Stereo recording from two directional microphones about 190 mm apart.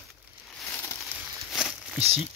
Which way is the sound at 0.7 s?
10° left (ahead or behind).